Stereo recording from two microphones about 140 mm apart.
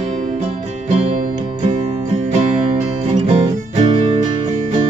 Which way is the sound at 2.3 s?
50° right (ahead or behind).